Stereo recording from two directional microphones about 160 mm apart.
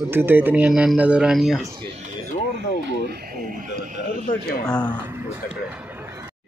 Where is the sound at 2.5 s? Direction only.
90° right.